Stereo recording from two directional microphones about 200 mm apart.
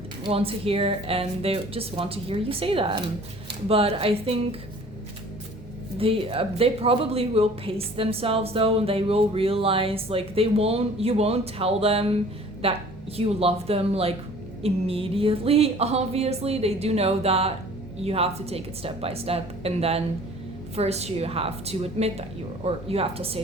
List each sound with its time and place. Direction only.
0.3 s speech: 30° right (ahead or behind)
6.0 s speech: 30° right (ahead or behind)